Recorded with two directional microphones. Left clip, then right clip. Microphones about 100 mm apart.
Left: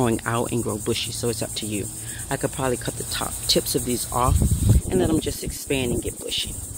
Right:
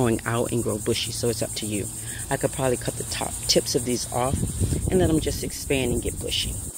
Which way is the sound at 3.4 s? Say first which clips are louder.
Even; 25° right (ahead or behind).